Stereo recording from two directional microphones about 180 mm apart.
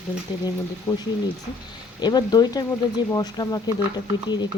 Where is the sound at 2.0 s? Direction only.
20° left (ahead or behind).